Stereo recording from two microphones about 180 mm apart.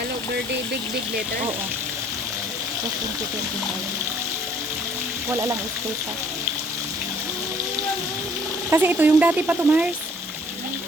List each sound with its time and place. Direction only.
5.3 s speech: 15° right (ahead or behind)
8.7 s speech: 10° right (ahead or behind)